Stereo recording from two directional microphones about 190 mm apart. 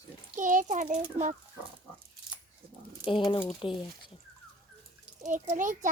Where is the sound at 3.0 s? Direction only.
25° left (ahead or behind).